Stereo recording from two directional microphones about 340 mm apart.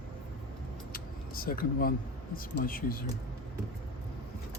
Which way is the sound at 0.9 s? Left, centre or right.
Left.